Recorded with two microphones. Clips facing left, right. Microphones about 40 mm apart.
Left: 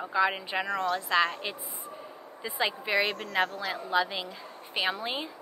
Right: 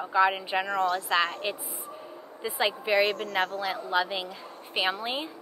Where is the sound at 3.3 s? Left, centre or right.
Centre.